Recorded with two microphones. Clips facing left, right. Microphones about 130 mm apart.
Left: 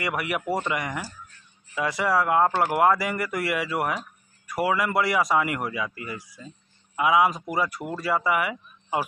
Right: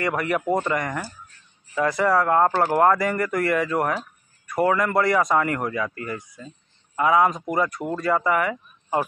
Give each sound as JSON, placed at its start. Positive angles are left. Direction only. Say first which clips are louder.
{"t": 0.0, "sound": "speech", "louder": "right 4 dB", "side_deg": 10}